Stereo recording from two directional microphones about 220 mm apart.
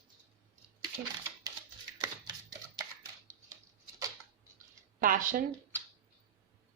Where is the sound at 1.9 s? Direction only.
20° right (ahead or behind).